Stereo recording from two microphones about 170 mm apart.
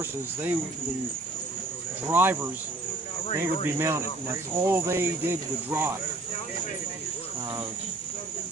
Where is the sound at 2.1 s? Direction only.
10° right (ahead or behind).